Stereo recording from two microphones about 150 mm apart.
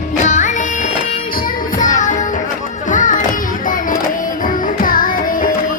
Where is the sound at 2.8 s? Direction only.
60° left (ahead or behind).